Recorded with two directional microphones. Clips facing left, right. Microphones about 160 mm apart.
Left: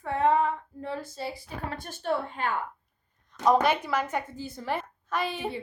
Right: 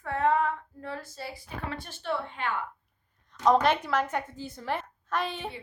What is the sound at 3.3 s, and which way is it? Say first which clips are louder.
A woman's voice: even; 5° left (ahead or behind).